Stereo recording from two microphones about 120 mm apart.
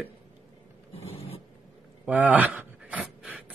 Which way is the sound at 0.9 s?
55° left (ahead or behind).